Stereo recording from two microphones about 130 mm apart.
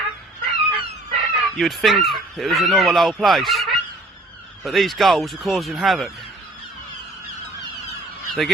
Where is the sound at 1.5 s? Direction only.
Centre (ahead or behind).